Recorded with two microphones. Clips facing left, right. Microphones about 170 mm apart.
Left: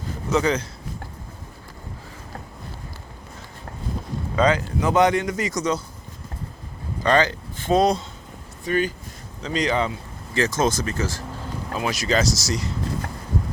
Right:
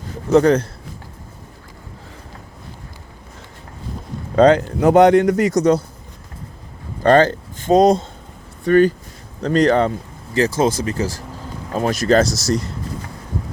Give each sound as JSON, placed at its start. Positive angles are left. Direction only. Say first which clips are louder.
{"t": 0.3, "sound": "a man's voice", "louder": "right 8 dB", "side_deg": -55}
{"t": 4.4, "sound": "a man's voice", "louder": "right 8 dB", "side_deg": -60}
{"t": 7.0, "sound": "speech", "louder": "right 7 dB", "side_deg": -50}
{"t": 9.4, "sound": "a man's voice", "louder": "right 8 dB", "side_deg": -60}
{"t": 10.3, "sound": "speech", "louder": "right 4 dB", "side_deg": -35}
{"t": 11.9, "sound": "a man's voice", "louder": "right 8 dB", "side_deg": -55}